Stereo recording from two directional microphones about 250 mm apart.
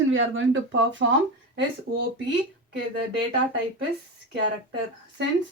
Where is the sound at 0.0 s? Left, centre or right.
Right.